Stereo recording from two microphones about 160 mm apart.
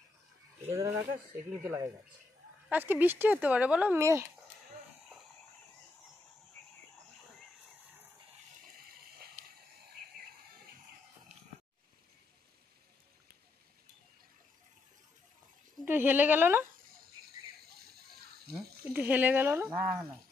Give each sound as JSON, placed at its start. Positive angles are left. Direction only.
{"t": 0.7, "sound": "speech", "side_deg": -20}
{"t": 15.8, "sound": "a woman's voice", "side_deg": -15}
{"t": 17.7, "sound": "a sound", "side_deg": -75}
{"t": 18.9, "sound": "speech", "side_deg": -10}